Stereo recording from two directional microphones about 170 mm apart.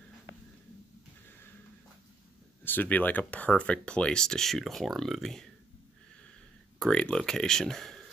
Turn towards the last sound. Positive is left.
turn(degrees=0)  # may be behind; listen again after turning